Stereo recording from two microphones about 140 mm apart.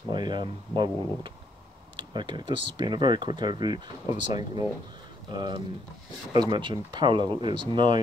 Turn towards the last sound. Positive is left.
turn(degrees=-35)  # may be behind; listen again after turning